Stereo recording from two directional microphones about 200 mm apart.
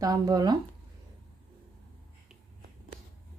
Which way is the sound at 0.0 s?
20° right (ahead or behind).